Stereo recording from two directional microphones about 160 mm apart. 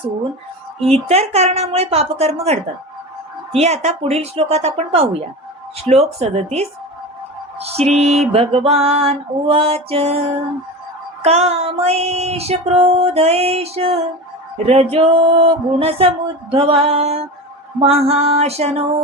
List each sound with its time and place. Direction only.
0.8 s music: 40° right (ahead or behind)